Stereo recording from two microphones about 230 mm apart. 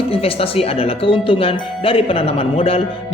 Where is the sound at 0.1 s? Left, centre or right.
Left.